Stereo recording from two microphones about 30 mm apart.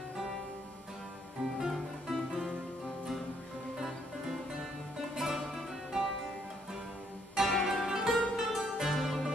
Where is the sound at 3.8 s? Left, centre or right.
Centre.